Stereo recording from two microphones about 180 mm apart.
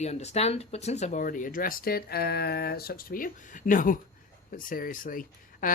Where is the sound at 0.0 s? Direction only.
40° left (ahead or behind).